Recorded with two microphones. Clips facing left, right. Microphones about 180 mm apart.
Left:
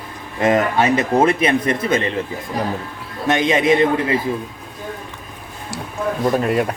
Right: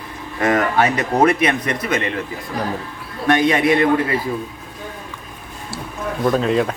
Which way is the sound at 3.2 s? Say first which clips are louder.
Right 1 dB; 20° left (ahead or behind).